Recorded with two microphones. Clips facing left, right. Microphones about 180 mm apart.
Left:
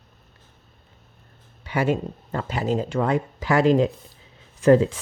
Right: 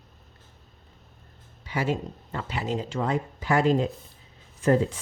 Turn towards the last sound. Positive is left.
turn(degrees=90)